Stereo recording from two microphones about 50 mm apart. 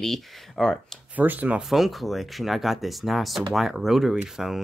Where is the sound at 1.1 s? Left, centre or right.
Right.